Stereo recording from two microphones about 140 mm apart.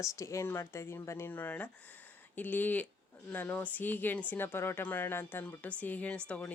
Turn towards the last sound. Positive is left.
turn(degrees=10)  # may be behind; listen again after turning